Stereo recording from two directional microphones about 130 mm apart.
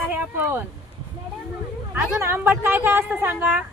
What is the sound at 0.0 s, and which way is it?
Speech, 15° right (ahead or behind).